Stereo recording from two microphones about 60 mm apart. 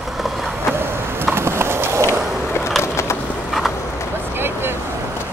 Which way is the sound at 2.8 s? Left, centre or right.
Left.